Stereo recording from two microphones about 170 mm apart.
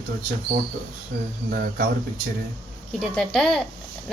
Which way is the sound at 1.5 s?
60° right (ahead or behind).